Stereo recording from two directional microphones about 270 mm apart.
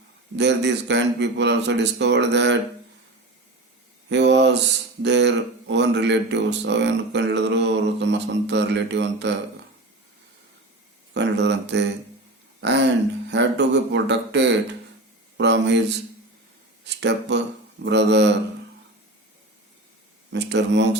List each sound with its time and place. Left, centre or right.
0.3 s speech: right
4.1 s mantra: right
5.0 s speech: right
11.1 s speech: right
16.8 s speech: right
20.3 s speech: right